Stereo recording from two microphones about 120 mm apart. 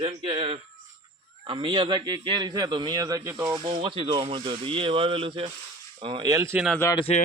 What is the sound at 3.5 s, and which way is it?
Speech, 40° right (ahead or behind).